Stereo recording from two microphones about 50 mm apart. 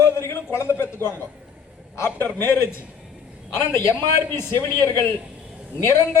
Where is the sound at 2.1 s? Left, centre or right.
Left.